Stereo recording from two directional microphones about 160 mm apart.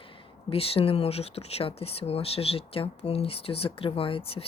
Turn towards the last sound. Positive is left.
turn(degrees=35)  # may be behind; listen again after turning